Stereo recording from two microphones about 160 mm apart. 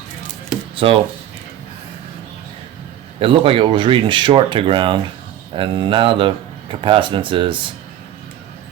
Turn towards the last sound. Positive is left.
turn(degrees=-30)  # may be behind; listen again after turning